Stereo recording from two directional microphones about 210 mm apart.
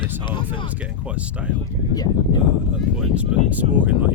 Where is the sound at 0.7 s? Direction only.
5° right (ahead or behind).